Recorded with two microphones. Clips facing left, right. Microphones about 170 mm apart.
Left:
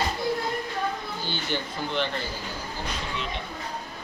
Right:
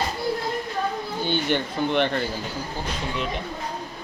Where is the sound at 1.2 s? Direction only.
60° right (ahead or behind).